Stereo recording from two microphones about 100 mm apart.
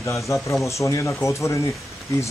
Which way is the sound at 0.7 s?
30° left (ahead or behind).